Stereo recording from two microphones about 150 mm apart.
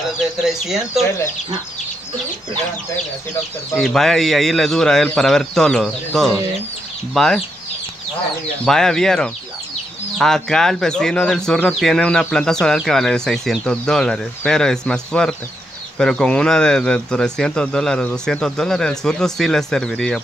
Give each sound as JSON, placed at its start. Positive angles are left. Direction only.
{"t": 0.2, "sound": "speech", "side_deg": 0}
{"t": 3.7, "sound": "speech", "side_deg": 0}
{"t": 8.6, "sound": "speech", "side_deg": 5}